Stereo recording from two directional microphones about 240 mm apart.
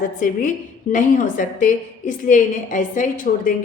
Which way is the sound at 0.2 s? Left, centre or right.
Left.